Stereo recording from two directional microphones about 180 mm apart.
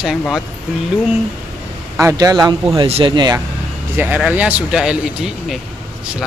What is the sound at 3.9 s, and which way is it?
Speech, 10° right (ahead or behind).